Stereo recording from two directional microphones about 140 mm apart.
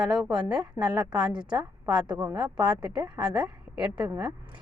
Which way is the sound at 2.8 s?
5° right (ahead or behind).